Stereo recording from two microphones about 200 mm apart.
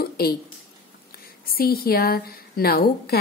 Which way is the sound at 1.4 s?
50° left (ahead or behind).